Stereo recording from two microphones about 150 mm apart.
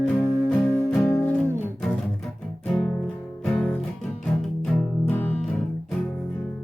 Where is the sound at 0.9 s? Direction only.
5° left (ahead or behind).